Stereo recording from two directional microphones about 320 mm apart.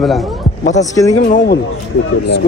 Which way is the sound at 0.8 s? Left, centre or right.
Centre.